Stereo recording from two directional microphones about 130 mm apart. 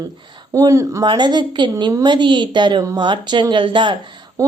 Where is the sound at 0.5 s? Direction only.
25° right (ahead or behind).